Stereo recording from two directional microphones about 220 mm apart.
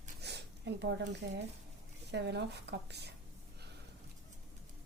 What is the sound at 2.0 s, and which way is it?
Speech, 50° right (ahead or behind).